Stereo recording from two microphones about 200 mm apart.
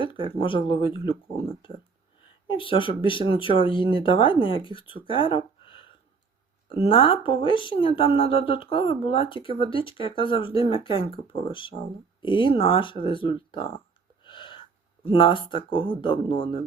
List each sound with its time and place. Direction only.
0.0 s speech: 25° left (ahead or behind)
2.5 s speech: 25° left (ahead or behind)
14.3 s a sound: 25° left (ahead or behind)
15.0 s speech: 25° left (ahead or behind)